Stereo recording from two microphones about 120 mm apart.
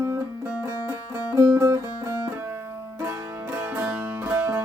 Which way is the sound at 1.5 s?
20° right (ahead or behind).